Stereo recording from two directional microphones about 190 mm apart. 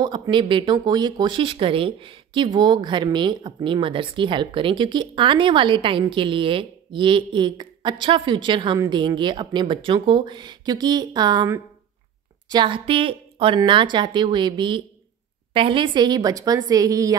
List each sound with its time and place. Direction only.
0.0 s speech: 25° right (ahead or behind)